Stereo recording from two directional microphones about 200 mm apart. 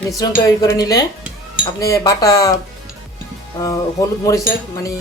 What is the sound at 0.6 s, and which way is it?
Speech, 15° left (ahead or behind).